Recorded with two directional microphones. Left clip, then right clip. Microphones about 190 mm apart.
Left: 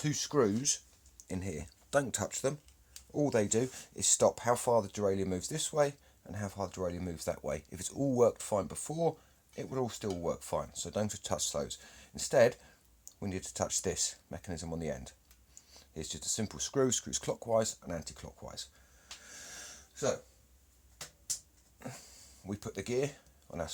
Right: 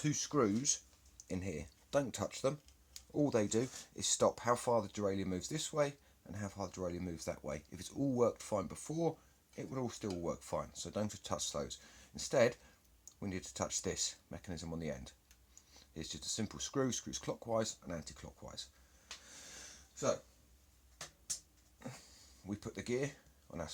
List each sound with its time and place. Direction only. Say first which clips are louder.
0.0 s speech: left 4 dB; 25° left (ahead or behind)
19.5 s gasp: left 5 dB; 25° left (ahead or behind)
21.8 s a sound: left 4 dB; 30° left (ahead or behind)